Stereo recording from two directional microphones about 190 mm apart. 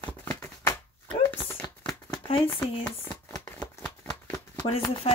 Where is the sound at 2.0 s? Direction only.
30° left (ahead or behind).